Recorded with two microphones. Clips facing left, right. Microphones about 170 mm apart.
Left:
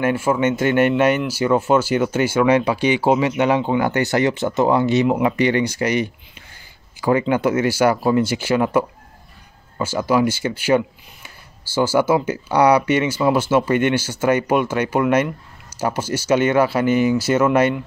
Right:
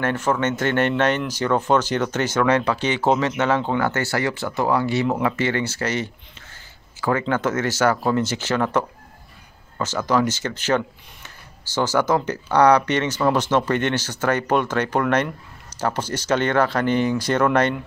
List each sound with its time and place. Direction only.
0.0 s speech: 10° left (ahead or behind)